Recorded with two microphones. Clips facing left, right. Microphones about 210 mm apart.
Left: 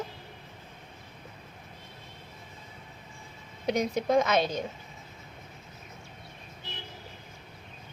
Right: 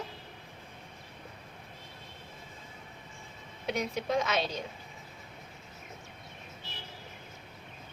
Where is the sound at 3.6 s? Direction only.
40° left (ahead or behind).